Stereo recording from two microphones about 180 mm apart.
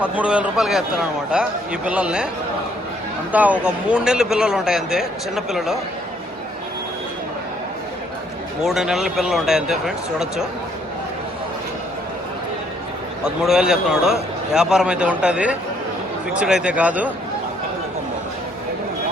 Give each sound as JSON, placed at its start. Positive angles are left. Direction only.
{"t": 0.0, "sound": "a man's voice", "side_deg": -5}
{"t": 3.3, "sound": "a man's voice", "side_deg": -10}
{"t": 8.6, "sound": "a man's voice", "side_deg": -5}
{"t": 13.2, "sound": "a man's voice", "side_deg": -5}